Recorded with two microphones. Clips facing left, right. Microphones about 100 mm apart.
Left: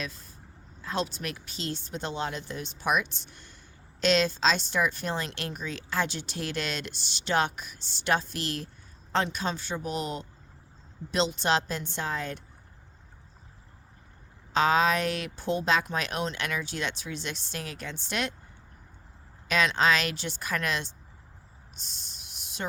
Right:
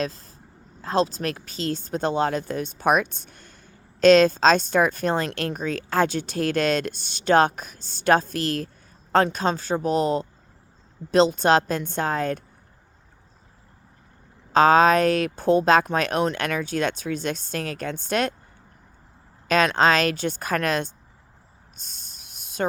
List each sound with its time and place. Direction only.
0.0 s speech: 35° right (ahead or behind)
1.9 s speech: 45° right (ahead or behind)
11.1 s speech: 45° right (ahead or behind)
14.5 s speech: 45° right (ahead or behind)
19.5 s speech: 45° right (ahead or behind)
21.8 s a sound: 45° right (ahead or behind)